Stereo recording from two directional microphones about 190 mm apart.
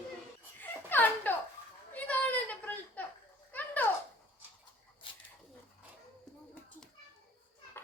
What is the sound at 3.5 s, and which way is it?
Children playing, 10° left (ahead or behind).